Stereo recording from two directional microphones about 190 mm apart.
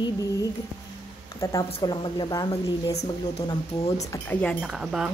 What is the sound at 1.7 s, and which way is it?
A woman's voice, 25° left (ahead or behind).